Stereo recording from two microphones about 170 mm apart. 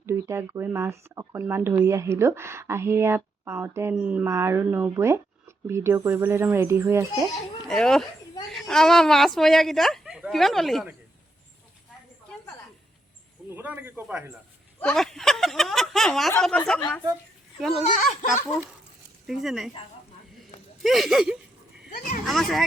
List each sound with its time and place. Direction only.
0.0 s speech: 15° right (ahead or behind)
7.7 s speech: 5° left (ahead or behind)
13.5 s speech: 10° right (ahead or behind)
14.8 s speech: 5° left (ahead or behind)
18.1 s speech: 45° left (ahead or behind)
19.3 s speech: centre (ahead or behind)
20.3 s a sound: centre (ahead or behind)
21.8 s speech: 50° left (ahead or behind)
22.3 s speech: centre (ahead or behind)